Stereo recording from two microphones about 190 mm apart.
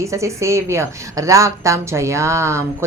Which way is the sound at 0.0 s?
15° right (ahead or behind).